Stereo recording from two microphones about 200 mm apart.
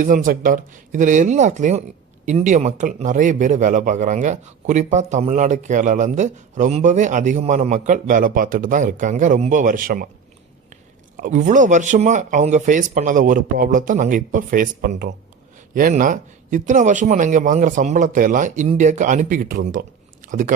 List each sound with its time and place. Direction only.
0.0 s a man's voice: 45° right (ahead or behind)
11.2 s a man's voice: 40° right (ahead or behind)